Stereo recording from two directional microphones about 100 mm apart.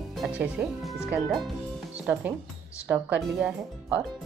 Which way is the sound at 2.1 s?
20° right (ahead or behind).